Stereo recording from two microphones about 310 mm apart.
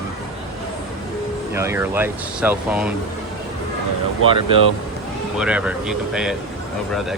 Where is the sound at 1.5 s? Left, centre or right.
Centre.